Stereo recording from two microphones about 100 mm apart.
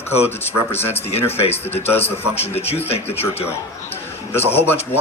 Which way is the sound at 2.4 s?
90° left.